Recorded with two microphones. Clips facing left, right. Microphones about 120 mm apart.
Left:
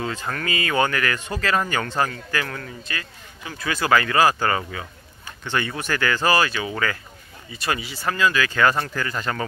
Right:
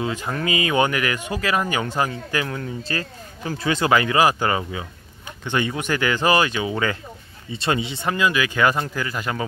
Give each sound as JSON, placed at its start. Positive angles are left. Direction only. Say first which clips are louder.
{"t": 0.0, "sound": "speech", "louder": "right 3 dB", "side_deg": -15}
{"t": 2.8, "sound": "speech", "louder": "right 6 dB", "side_deg": -35}
{"t": 3.6, "sound": "speech", "louder": "right 1 dB", "side_deg": -25}